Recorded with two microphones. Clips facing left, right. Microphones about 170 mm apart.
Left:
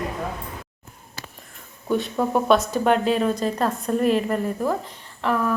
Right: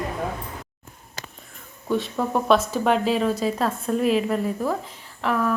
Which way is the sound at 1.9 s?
Centre (ahead or behind).